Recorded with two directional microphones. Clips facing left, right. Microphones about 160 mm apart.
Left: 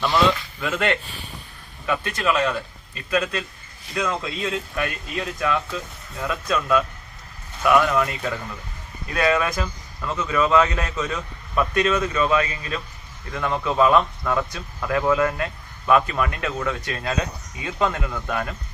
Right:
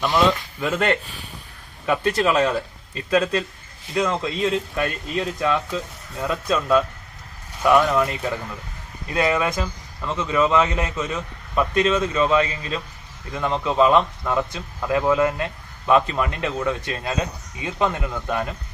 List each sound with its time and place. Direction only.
0.6 s a man's voice: 40° right (ahead or behind); by 18.5 s 20° right (ahead or behind)